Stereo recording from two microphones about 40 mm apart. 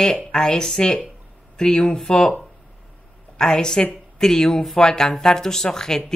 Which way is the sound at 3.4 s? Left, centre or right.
Centre.